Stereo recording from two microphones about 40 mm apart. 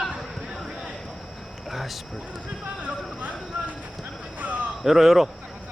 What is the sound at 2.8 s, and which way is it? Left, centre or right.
Clip-clop, right.